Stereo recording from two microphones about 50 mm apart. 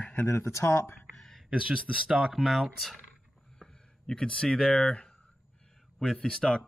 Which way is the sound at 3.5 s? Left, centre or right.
Centre.